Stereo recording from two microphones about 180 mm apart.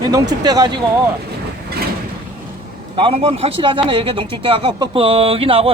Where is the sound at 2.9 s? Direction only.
30° right (ahead or behind).